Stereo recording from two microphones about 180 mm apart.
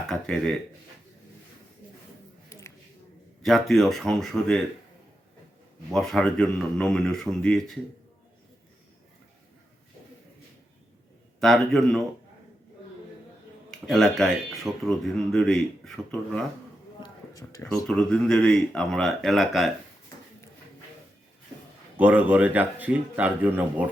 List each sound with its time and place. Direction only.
0.1 s speech: 5° left (ahead or behind)
2.5 s a sound: 15° left (ahead or behind)
3.4 s speech: centre (ahead or behind)
5.9 s speech: centre (ahead or behind)
11.3 s speech: centre (ahead or behind)
13.7 s speech: centre (ahead or behind)
17.0 s a sound: 20° left (ahead or behind)
17.8 s speech: 5° left (ahead or behind)
21.9 s speech: 10° right (ahead or behind)